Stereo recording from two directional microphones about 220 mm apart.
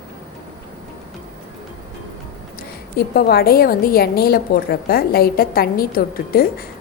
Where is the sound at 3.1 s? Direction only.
45° left (ahead or behind).